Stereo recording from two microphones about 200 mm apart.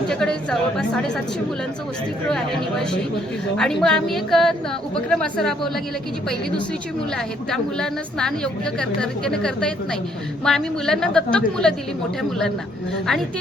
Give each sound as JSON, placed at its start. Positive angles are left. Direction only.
{"t": 0.1, "sound": "a woman's voice", "side_deg": 5}
{"t": 2.3, "sound": "a woman's voice", "side_deg": 5}
{"t": 7.5, "sound": "a woman's voice", "side_deg": 5}